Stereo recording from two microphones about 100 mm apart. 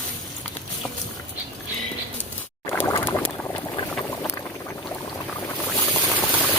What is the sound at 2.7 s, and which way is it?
Boat, 25° left (ahead or behind).